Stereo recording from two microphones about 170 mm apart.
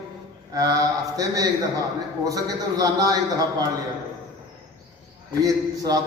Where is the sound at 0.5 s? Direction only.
20° right (ahead or behind).